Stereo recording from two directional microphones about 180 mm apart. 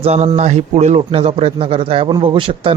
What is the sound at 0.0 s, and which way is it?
A man's voice, 35° right (ahead or behind).